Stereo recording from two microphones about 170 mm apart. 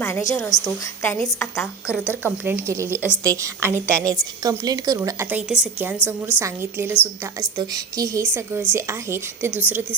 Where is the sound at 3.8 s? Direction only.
5° left (ahead or behind).